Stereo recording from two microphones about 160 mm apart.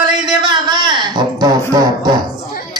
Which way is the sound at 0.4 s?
30° right (ahead or behind).